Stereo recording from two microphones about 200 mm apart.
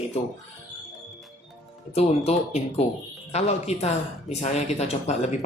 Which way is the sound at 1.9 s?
30° left (ahead or behind).